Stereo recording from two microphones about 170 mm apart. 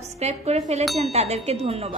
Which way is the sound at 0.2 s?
40° right (ahead or behind).